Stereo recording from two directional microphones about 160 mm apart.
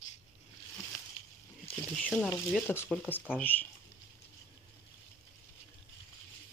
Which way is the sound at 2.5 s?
15° left (ahead or behind).